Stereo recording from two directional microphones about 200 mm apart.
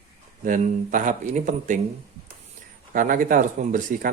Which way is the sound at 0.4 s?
40° right (ahead or behind).